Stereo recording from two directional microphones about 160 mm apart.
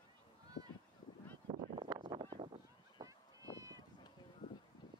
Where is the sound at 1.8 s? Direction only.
25° right (ahead or behind).